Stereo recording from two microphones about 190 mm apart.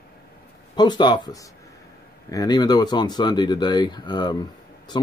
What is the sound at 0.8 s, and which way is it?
Speech, 20° left (ahead or behind).